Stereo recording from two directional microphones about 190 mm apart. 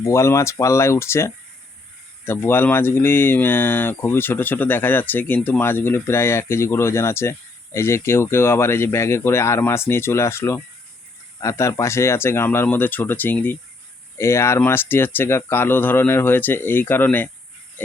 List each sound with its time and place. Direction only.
0.0 s speech: 15° left (ahead or behind)